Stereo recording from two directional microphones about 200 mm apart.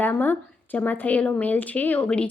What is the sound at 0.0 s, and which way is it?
Speech, 10° left (ahead or behind).